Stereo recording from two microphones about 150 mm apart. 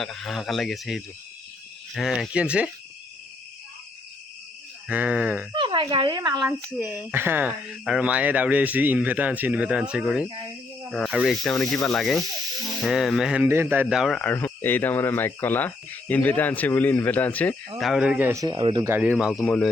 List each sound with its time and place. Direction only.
0.0 s speech: centre (ahead or behind)
4.9 s speech: 10° right (ahead or behind)
5.5 s speech: 35° right (ahead or behind)
6.8 s speech: centre (ahead or behind)
7.1 s speech: 15° right (ahead or behind); by 17.6 s 10° left (ahead or behind)
17.7 s speech: centre (ahead or behind)
18.4 s speech: 30° right (ahead or behind)
18.8 s speech: 15° right (ahead or behind)
19.3 s speech: 10° left (ahead or behind)